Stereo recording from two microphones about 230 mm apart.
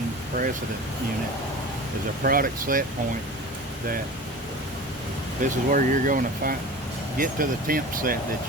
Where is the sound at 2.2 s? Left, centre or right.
Right.